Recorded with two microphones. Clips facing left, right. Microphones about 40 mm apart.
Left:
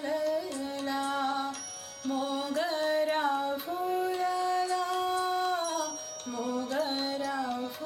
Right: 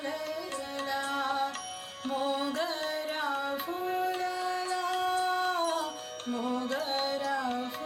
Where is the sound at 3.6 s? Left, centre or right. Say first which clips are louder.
Left 1 dB; right.